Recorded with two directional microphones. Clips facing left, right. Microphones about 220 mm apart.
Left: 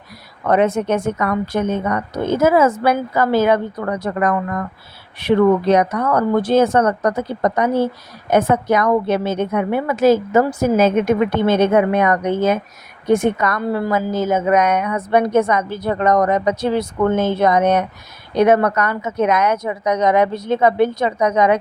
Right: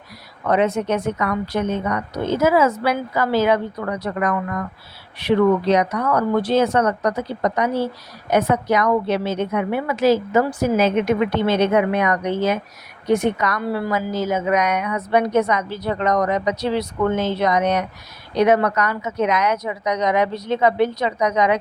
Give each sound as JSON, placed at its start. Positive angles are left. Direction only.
{"t": 0.4, "sound": "a woman's voice", "side_deg": 50}